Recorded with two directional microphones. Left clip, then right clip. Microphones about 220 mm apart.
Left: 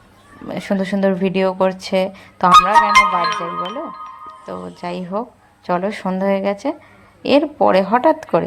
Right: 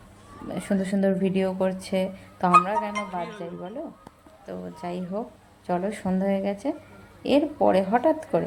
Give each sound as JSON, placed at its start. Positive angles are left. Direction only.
{"t": 0.4, "sound": "speech", "side_deg": 10}
{"t": 2.9, "sound": "speech", "side_deg": 45}
{"t": 4.4, "sound": "speech", "side_deg": 10}